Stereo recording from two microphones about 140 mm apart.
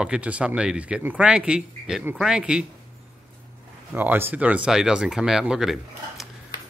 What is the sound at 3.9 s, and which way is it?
Speech, 15° right (ahead or behind).